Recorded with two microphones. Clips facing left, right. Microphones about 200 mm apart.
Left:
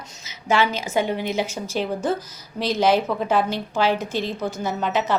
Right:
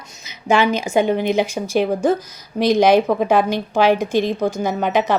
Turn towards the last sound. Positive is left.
turn(degrees=-15)  # may be behind; listen again after turning